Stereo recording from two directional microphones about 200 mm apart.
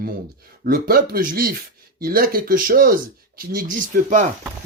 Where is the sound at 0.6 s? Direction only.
50° right (ahead or behind).